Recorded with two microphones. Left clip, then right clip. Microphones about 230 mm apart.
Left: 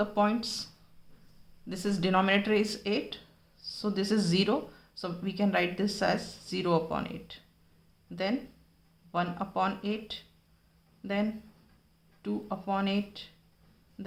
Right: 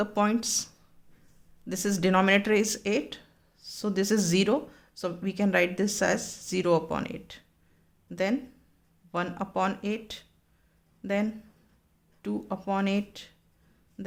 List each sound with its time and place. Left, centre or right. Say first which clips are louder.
0.0 s speech: right 1 dB; right